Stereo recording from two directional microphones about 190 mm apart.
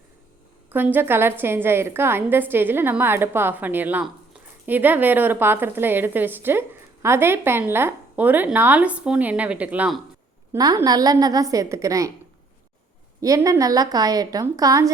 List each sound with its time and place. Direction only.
0.7 s a woman's voice: 10° right (ahead or behind)
13.2 s a woman's voice: 15° right (ahead or behind)